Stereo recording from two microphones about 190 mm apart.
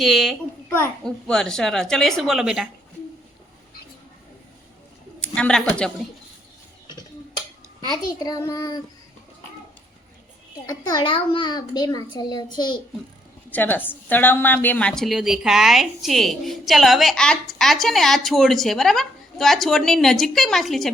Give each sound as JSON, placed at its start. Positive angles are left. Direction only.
{"t": 0.0, "sound": "a woman's voice", "side_deg": 0}
{"t": 5.2, "sound": "a woman's voice", "side_deg": 5}
{"t": 7.9, "sound": "a child's voice", "side_deg": 20}
{"t": 10.7, "sound": "a child's voice", "side_deg": 20}
{"t": 13.5, "sound": "a woman's voice", "side_deg": 10}